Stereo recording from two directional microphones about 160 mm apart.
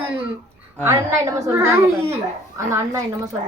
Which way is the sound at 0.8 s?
15° right (ahead or behind).